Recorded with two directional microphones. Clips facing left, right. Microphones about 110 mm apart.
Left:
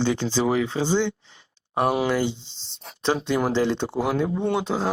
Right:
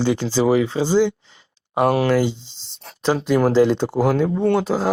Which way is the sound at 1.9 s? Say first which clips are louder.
Right 5 dB; 5° left (ahead or behind).